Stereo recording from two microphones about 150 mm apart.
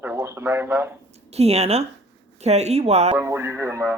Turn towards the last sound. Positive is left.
turn(degrees=-20)  # may be behind; listen again after turning